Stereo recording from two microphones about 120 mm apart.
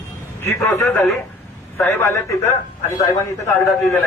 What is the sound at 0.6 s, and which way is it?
A man's voice, 20° left (ahead or behind).